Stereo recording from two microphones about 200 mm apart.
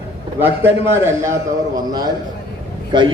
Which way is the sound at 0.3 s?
10° right (ahead or behind).